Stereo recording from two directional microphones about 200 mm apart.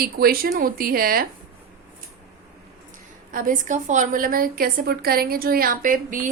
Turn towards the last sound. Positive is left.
turn(degrees=-40)  # may be behind; listen again after turning